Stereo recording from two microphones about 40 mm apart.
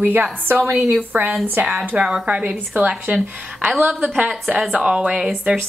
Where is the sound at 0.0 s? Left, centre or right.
Right.